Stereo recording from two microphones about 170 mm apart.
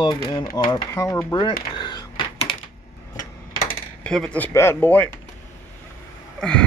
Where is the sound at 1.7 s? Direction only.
25° left (ahead or behind).